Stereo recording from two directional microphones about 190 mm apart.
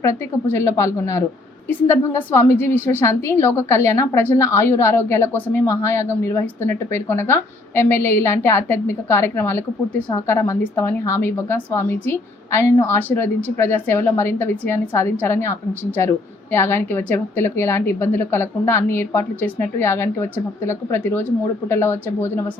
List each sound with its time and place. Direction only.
0.0 s a woman's voice: 15° left (ahead or behind)